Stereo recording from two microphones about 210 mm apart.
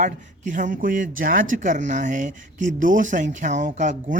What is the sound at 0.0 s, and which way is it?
Speech, 35° right (ahead or behind).